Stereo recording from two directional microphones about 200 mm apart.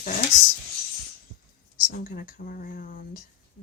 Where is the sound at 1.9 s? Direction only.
45° left (ahead or behind).